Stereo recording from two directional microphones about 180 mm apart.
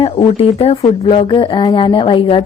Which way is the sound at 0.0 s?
35° left (ahead or behind).